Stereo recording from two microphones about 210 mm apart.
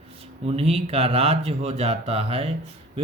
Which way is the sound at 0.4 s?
30° right (ahead or behind).